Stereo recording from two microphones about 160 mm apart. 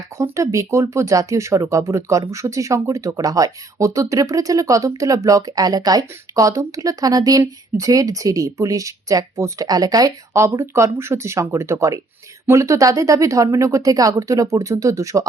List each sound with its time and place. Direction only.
0.2 s speech: 20° right (ahead or behind)